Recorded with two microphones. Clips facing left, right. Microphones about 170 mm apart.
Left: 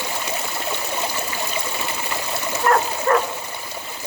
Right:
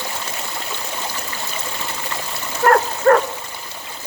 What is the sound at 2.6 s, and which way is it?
Dog, 65° right (ahead or behind).